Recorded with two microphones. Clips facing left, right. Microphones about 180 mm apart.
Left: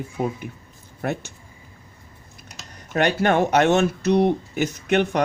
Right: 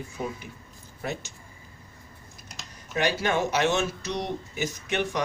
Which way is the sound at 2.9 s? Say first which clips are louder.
Left 6 dB; 60° left (ahead or behind).